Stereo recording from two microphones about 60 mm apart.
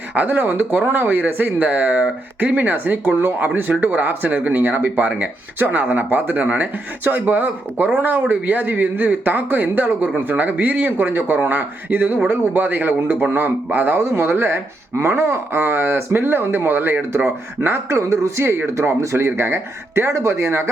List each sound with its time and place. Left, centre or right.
0.1 s speech: right